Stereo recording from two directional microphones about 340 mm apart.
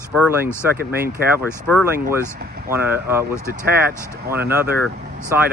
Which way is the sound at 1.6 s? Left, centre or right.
Centre.